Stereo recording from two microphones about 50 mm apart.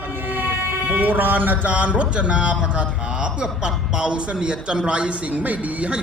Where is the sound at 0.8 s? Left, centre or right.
Right.